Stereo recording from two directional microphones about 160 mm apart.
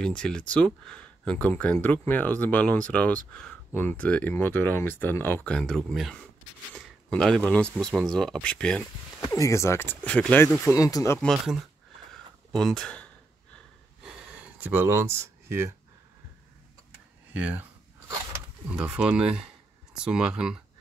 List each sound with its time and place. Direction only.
0.0 s speech: 5° left (ahead or behind)
9.2 s speech: 20° left (ahead or behind)
12.1 s a sound: centre (ahead or behind)
14.0 s a sound: 5° right (ahead or behind)
17.3 s speech: 10° right (ahead or behind)
18.7 s speech: 5° right (ahead or behind)